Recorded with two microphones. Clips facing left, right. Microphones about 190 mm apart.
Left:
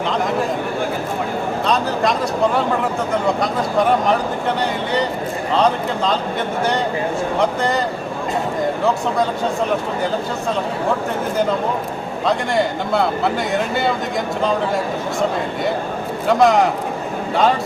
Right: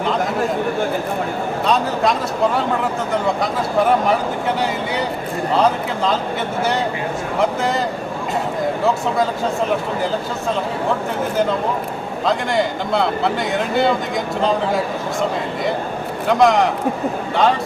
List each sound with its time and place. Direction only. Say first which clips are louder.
1.6 s a man's voice: right 1 dB; centre (ahead or behind)
7.3 s speech: right 1 dB; 5° right (ahead or behind)
12.2 s speech: even; centre (ahead or behind)
16.3 s speech: even; centre (ahead or behind)